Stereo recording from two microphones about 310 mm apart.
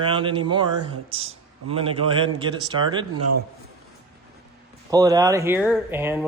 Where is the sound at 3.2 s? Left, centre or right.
Right.